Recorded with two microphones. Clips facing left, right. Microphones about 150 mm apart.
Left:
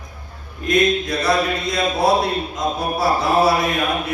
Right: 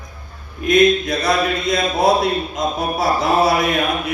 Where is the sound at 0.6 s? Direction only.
20° right (ahead or behind).